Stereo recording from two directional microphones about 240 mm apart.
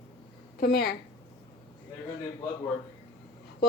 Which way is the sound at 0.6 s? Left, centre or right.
Left.